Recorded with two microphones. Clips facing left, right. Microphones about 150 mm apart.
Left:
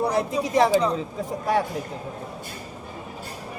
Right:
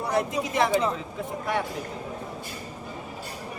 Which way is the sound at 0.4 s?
Centre (ahead or behind).